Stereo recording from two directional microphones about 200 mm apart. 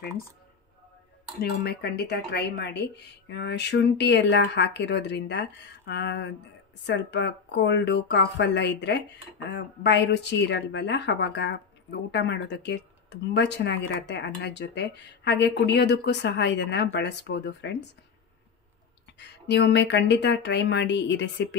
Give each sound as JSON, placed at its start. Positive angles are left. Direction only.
{"t": 1.4, "sound": "a woman's voice", "side_deg": 55}
{"t": 19.1, "sound": "a woman's voice", "side_deg": 60}